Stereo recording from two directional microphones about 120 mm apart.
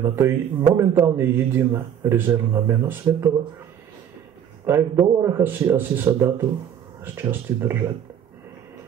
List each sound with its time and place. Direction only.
0.0 s a man's voice: 20° right (ahead or behind)
4.6 s a man's voice: 20° right (ahead or behind)